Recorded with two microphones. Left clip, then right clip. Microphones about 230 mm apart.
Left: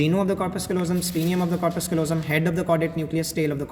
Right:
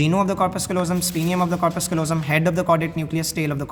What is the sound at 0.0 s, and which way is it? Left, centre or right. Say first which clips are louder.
A man's voice: right 3 dB; right.